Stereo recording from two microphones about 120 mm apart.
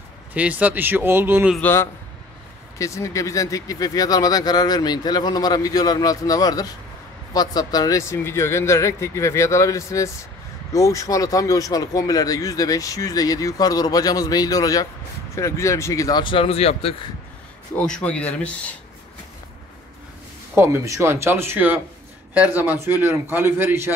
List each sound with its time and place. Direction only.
0.3 s a man's voice: 10° right (ahead or behind)
1.6 s speech: 20° left (ahead or behind); by 16.9 s 55° left (ahead or behind)
17.8 s speech: 10° left (ahead or behind)
20.5 s a man's voice: 25° right (ahead or behind)